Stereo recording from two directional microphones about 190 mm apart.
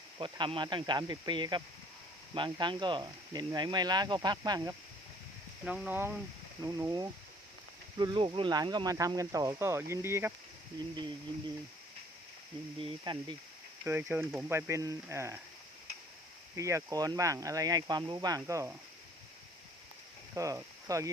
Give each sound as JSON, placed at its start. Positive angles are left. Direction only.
{"t": 0.2, "sound": "speech", "side_deg": -25}
{"t": 5.6, "sound": "speech", "side_deg": -5}
{"t": 12.8, "sound": "speech", "side_deg": -25}
{"t": 13.8, "sound": "speech", "side_deg": -10}
{"t": 16.6, "sound": "speech", "side_deg": -15}
{"t": 20.3, "sound": "speech", "side_deg": -15}